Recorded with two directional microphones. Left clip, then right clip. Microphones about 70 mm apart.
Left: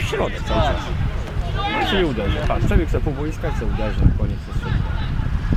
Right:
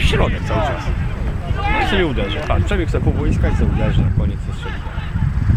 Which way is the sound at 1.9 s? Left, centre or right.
Right.